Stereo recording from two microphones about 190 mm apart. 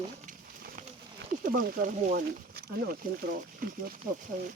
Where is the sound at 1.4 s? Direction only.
45° right (ahead or behind).